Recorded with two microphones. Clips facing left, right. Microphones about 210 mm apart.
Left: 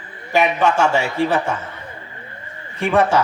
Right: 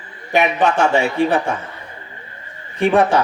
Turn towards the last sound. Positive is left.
turn(degrees=-15)  # may be behind; listen again after turning